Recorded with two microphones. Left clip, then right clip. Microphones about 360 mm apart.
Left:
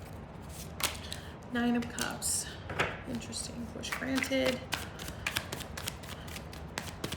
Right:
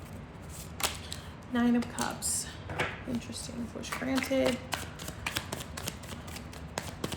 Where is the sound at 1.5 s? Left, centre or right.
Centre.